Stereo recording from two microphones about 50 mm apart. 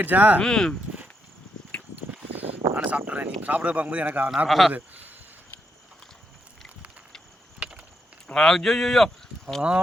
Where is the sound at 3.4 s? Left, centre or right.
Right.